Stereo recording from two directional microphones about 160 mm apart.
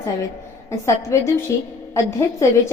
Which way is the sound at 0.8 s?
20° left (ahead or behind).